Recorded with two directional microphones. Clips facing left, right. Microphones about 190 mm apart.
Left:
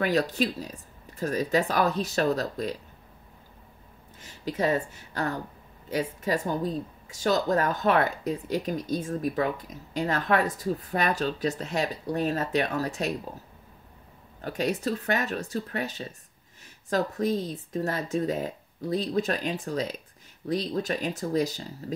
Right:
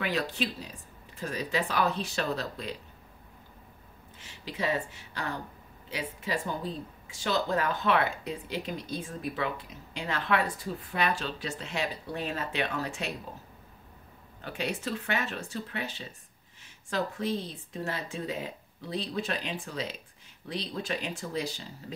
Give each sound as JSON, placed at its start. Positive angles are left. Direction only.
{"t": 0.0, "sound": "speech", "side_deg": 40}
{"t": 4.2, "sound": "a woman's voice", "side_deg": 45}
{"t": 14.4, "sound": "speech", "side_deg": 40}